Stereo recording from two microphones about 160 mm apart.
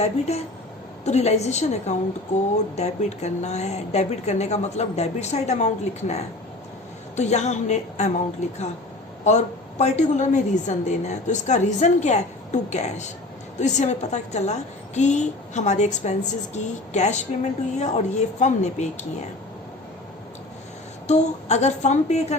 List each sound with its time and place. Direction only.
0.0 s a woman's voice: 40° left (ahead or behind)
21.1 s a woman's voice: 45° left (ahead or behind)